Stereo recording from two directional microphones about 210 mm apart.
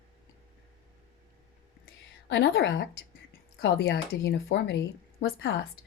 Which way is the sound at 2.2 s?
60° left (ahead or behind).